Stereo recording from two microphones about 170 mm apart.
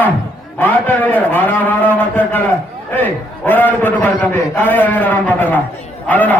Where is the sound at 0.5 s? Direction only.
10° left (ahead or behind).